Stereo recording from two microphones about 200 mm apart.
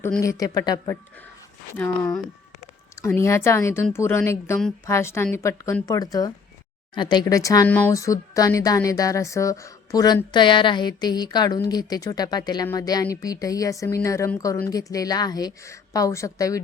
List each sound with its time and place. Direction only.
0.2 s speech: 15° left (ahead or behind)
1.8 s speech: 5° left (ahead or behind)